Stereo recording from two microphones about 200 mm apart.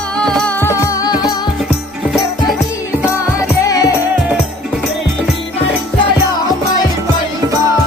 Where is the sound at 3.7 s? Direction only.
15° left (ahead or behind).